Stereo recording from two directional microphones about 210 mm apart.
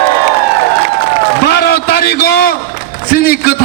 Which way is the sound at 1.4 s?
50° left (ahead or behind).